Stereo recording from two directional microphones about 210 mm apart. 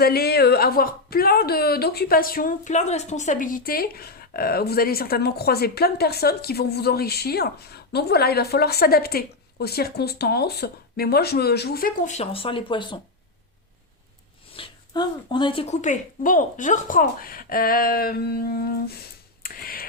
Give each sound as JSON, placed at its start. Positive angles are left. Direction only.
{"t": 0.0, "sound": "a woman's voice", "side_deg": 50}
{"t": 14.5, "sound": "speech", "side_deg": 25}
{"t": 19.4, "sound": "a sound", "side_deg": 45}